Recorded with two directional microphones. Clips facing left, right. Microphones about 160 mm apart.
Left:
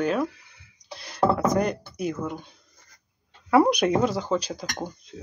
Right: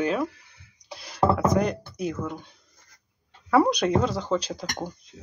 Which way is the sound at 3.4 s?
10° left (ahead or behind).